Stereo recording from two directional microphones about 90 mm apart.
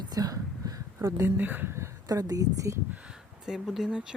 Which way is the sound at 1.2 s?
20° right (ahead or behind).